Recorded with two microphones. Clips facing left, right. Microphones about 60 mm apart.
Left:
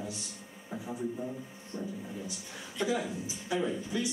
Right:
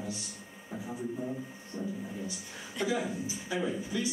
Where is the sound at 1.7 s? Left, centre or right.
Centre.